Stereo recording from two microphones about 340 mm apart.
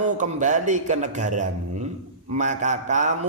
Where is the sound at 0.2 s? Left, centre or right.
Right.